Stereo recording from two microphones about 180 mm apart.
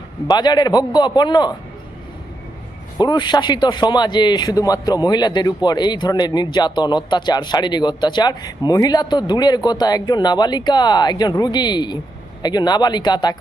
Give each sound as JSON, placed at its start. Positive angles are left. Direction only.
{"t": 0.3, "sound": "a man's voice", "side_deg": 25}
{"t": 3.0, "sound": "a man's voice", "side_deg": 25}